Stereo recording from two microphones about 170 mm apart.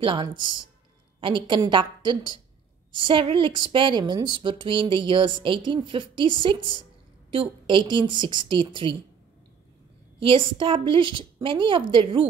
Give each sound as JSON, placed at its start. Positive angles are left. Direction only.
{"t": 0.0, "sound": "a woman's voice", "side_deg": -30}
{"t": 10.2, "sound": "a woman's voice", "side_deg": -30}